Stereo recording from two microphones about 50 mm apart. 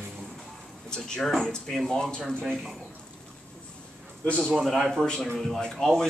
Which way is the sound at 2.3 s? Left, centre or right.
Centre.